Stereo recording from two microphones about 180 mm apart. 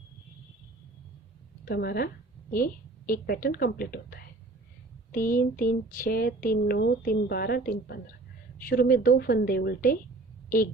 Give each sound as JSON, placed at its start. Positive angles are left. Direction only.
{"t": 1.6, "sound": "speech", "side_deg": 60}
{"t": 3.1, "sound": "speech", "side_deg": 55}